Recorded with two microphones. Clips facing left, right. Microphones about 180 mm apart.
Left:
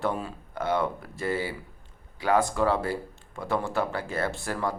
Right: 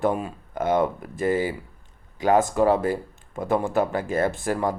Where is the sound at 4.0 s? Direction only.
45° right (ahead or behind).